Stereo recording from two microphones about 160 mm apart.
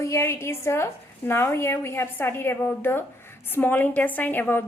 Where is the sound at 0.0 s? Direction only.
15° left (ahead or behind).